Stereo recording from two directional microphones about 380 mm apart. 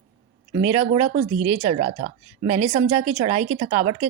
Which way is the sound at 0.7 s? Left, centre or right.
Centre.